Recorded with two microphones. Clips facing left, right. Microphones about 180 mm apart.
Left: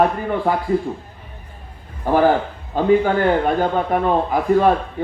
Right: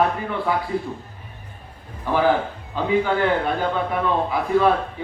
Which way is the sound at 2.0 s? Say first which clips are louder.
Left 4 dB; 45° left (ahead or behind).